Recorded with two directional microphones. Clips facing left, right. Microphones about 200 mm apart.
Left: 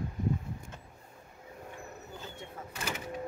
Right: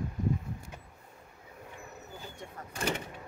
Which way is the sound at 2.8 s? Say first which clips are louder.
Right 6 dB; 30° right (ahead or behind).